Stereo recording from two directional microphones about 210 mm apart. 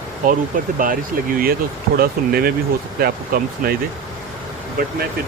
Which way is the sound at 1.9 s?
45° right (ahead or behind).